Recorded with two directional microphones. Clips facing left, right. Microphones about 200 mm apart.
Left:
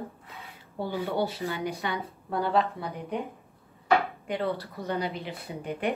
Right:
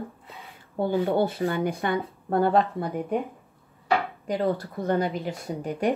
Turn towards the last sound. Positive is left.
turn(degrees=-45)  # may be behind; listen again after turning